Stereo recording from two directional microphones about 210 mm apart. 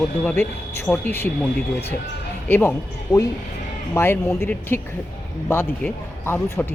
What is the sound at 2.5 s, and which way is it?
Speech, 10° left (ahead or behind).